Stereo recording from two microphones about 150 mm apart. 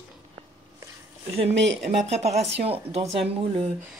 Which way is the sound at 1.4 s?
45° right (ahead or behind).